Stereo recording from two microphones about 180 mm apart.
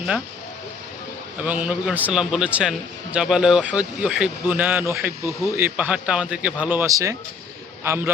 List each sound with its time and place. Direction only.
1.5 s a man's voice: 5° right (ahead or behind)